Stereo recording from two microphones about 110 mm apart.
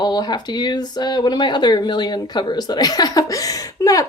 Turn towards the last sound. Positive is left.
turn(degrees=30)  # may be behind; listen again after turning